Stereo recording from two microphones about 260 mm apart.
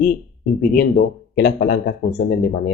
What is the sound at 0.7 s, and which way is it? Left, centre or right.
Speech, left.